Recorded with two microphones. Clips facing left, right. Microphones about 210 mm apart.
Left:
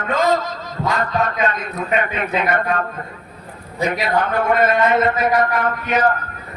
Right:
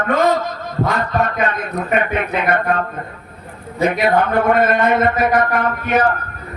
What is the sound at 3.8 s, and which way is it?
A man's voice, 55° right (ahead or behind).